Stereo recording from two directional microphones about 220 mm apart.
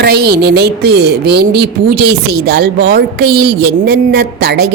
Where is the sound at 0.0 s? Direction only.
45° right (ahead or behind).